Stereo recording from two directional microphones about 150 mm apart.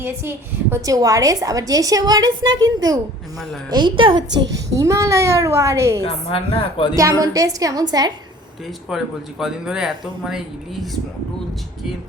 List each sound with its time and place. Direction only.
0.0 s a woman's voice: 15° right (ahead or behind)
6.1 s speech: 35° left (ahead or behind)
6.9 s a woman's voice: 20° right (ahead or behind)
8.9 s speech: centre (ahead or behind)